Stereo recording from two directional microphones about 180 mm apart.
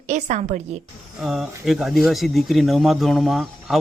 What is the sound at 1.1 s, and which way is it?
Speech, centre (ahead or behind).